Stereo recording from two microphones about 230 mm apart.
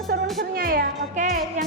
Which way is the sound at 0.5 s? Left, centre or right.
Right.